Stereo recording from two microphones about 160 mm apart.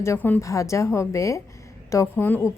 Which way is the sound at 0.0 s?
15° left (ahead or behind).